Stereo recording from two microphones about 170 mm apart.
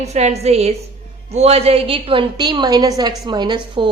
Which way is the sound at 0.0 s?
40° right (ahead or behind).